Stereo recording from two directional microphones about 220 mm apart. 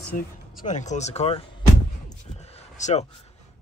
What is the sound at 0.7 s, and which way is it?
Speech, 35° left (ahead or behind).